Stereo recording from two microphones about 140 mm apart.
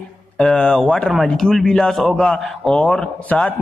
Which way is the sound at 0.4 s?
5° left (ahead or behind).